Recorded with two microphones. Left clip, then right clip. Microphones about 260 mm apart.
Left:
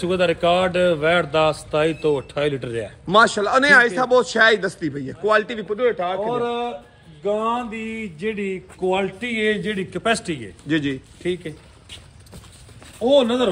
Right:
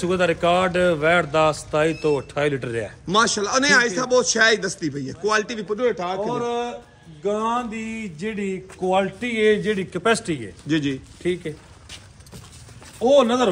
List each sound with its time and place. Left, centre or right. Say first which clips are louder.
0.0 s a man's voice: left 1 dB; centre
3.1 s a man's voice: left 4 dB; centre
6.3 s a man's voice: left 1 dB; right
10.7 s a man's voice: left 1 dB; centre
11.2 s a man's voice: right 1 dB; right
13.0 s speech: even; right